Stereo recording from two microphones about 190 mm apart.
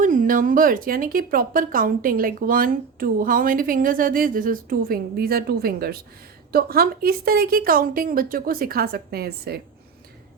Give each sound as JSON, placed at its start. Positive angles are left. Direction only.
{"t": 0.0, "sound": "speech", "side_deg": -45}